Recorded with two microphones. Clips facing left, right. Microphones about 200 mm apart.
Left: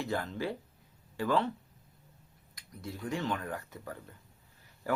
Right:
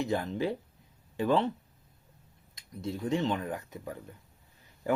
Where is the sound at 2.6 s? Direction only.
25° right (ahead or behind).